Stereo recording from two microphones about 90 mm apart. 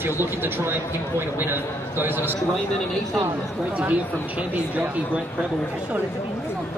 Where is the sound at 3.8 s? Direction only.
15° right (ahead or behind).